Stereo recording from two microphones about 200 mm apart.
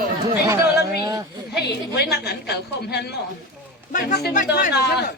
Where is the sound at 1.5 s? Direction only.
55° left (ahead or behind).